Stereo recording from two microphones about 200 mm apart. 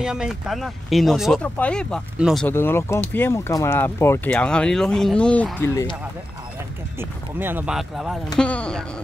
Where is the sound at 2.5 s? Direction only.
10° left (ahead or behind).